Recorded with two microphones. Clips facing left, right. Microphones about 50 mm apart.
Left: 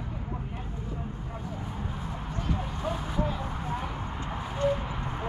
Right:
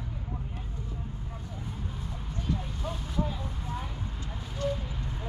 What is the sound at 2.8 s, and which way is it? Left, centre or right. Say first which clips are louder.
Vehicle: left 3 dB; centre.